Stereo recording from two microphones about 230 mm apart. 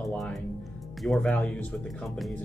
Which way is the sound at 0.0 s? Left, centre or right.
Centre.